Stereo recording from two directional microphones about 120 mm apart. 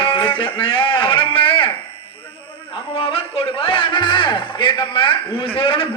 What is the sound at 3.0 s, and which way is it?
A man's voice, 50° left (ahead or behind).